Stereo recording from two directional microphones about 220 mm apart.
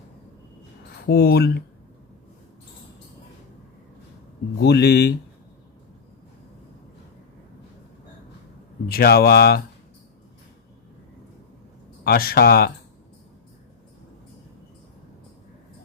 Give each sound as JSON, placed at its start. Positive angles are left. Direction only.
{"t": 1.0, "sound": "speech", "side_deg": 45}
{"t": 4.6, "sound": "speech", "side_deg": 50}
{"t": 8.9, "sound": "speech", "side_deg": 45}
{"t": 12.0, "sound": "speech", "side_deg": 45}